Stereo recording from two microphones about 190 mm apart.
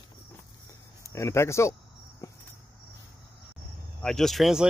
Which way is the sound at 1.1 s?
15° left (ahead or behind).